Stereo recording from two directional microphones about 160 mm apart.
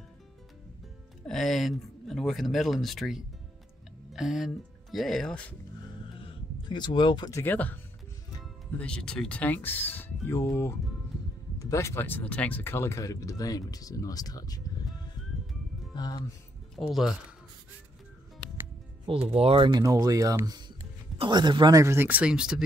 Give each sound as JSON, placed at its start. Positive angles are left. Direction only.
{"t": 1.2, "sound": "speech", "side_deg": 0}
{"t": 6.2, "sound": "speech", "side_deg": 30}
{"t": 15.9, "sound": "speech", "side_deg": 25}
{"t": 16.8, "sound": "speech", "side_deg": 0}
{"t": 19.2, "sound": "speech", "side_deg": -40}
{"t": 19.8, "sound": "speech", "side_deg": -20}